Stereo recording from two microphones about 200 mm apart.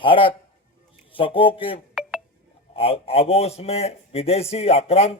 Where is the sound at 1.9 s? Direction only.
Centre (ahead or behind).